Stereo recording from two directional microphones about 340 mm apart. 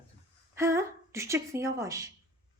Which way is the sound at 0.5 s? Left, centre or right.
Centre.